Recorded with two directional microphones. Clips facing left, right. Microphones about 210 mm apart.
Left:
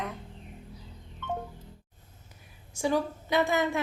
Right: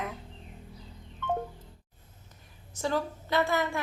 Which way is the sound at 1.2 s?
50° right (ahead or behind).